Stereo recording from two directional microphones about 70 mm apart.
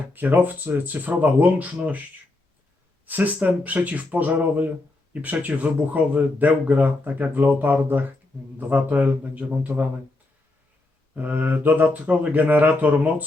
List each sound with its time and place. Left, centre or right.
0.1 s speech: right
3.1 s speech: right
11.1 s speech: right